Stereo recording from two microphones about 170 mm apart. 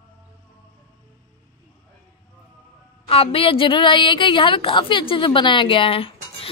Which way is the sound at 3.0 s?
35° left (ahead or behind).